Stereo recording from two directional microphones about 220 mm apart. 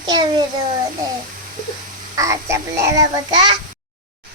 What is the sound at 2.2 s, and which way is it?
A child's voice, 15° right (ahead or behind).